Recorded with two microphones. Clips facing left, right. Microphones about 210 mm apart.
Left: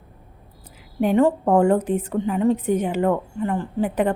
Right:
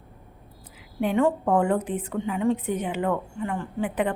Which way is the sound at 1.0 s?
40° left (ahead or behind).